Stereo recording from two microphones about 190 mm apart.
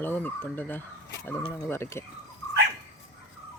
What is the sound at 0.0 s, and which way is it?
Speech, 10° left (ahead or behind).